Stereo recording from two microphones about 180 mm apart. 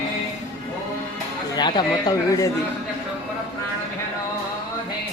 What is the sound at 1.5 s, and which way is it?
Speech, 25° left (ahead or behind).